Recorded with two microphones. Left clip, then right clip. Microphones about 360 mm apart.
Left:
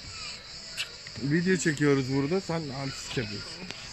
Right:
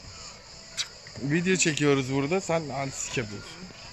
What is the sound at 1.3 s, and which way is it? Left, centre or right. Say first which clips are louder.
Cricket: right 2 dB; centre.